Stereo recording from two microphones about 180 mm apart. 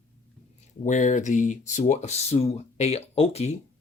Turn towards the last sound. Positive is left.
turn(degrees=35)  # may be behind; listen again after turning